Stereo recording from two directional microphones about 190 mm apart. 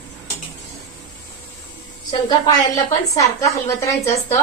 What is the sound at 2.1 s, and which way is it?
A woman's voice, 20° left (ahead or behind).